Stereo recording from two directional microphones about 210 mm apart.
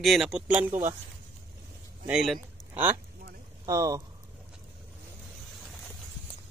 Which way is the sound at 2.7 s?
10° right (ahead or behind).